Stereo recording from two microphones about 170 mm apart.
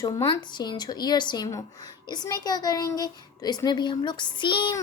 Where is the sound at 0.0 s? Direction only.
25° left (ahead or behind).